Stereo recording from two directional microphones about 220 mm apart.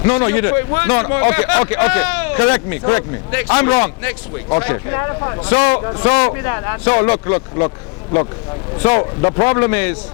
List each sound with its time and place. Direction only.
0.0 s speech: 25° left (ahead or behind)
8.8 s speech: 25° left (ahead or behind)